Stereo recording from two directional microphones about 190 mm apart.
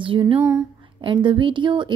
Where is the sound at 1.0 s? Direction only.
25° right (ahead or behind).